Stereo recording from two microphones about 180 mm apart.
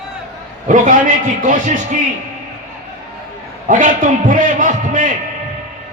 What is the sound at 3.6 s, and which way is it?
A man's voice, 45° right (ahead or behind).